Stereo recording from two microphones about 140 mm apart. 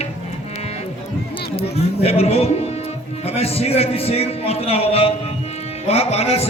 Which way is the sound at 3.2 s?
45° left (ahead or behind).